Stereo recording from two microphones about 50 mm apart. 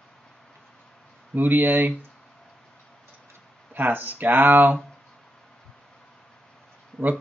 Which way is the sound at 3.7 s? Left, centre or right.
Right.